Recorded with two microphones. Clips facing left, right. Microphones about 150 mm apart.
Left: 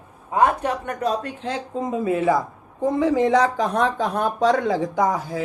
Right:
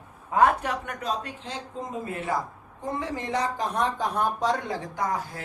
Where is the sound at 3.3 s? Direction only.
90° left.